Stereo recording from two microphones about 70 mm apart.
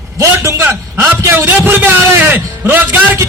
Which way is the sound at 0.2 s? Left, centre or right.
Right.